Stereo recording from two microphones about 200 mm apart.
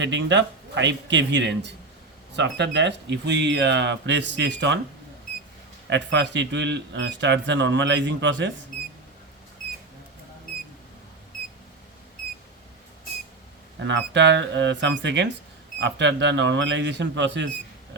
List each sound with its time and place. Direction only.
0.0 s speech: 65° right (ahead or behind)
5.9 s speech: 65° right (ahead or behind)
13.7 s speech: 65° right (ahead or behind)